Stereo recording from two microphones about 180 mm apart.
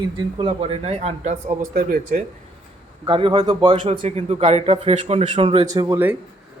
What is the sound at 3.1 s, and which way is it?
Speech, 30° right (ahead or behind).